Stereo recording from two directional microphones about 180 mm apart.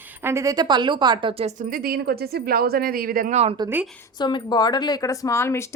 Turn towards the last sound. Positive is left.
turn(degrees=15)  # may be behind; listen again after turning